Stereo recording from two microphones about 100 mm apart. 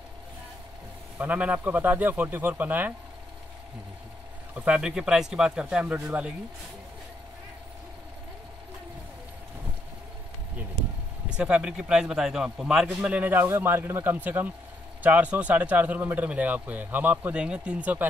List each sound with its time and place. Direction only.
1.1 s a man's voice: 15° right (ahead or behind)
4.6 s a man's voice: 10° right (ahead or behind)
11.2 s a man's voice: 10° right (ahead or behind)
12.8 s a man's voice: 15° right (ahead or behind)